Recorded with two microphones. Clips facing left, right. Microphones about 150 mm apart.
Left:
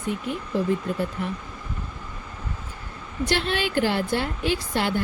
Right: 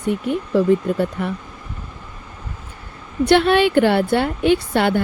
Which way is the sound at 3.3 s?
65° right (ahead or behind).